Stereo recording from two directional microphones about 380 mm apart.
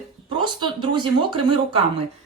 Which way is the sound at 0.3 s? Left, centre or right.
Centre.